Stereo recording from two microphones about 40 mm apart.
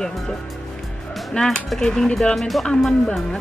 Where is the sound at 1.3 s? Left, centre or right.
Centre.